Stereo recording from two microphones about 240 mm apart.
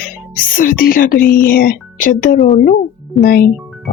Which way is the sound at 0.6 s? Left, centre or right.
Left.